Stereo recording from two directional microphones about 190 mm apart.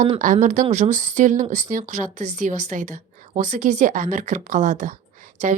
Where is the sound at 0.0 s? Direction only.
40° right (ahead or behind).